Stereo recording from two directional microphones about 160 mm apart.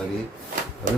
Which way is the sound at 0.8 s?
55° right (ahead or behind).